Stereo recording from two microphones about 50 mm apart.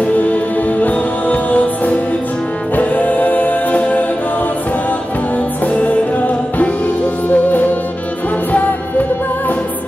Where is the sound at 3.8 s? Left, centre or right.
Left.